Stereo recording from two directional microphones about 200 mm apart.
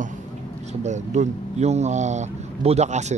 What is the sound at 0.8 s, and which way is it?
Speech, 35° right (ahead or behind).